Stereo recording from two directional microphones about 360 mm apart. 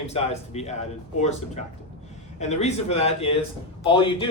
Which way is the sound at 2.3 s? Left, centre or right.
Centre.